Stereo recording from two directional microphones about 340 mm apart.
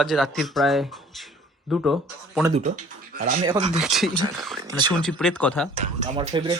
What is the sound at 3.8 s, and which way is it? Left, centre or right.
Speech, centre.